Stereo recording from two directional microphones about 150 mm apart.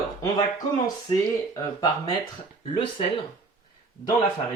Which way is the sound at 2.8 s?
35° left (ahead or behind).